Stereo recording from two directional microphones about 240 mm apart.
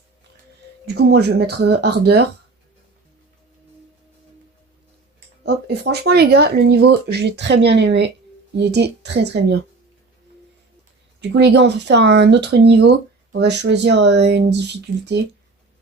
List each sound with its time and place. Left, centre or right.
0.9 s speech: right
5.4 s speech: right
11.2 s speech: right